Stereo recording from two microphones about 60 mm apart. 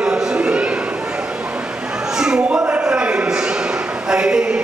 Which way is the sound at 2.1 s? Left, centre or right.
Centre.